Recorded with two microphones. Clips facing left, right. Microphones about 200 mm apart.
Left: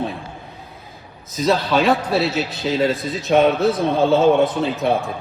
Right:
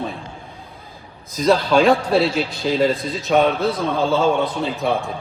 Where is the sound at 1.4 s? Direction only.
5° left (ahead or behind).